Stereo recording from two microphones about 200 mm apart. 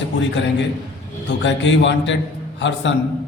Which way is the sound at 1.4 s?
65° left (ahead or behind).